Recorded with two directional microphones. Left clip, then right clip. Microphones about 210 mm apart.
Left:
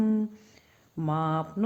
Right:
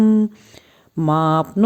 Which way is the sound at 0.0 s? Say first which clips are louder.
Right 11 dB; 35° right (ahead or behind).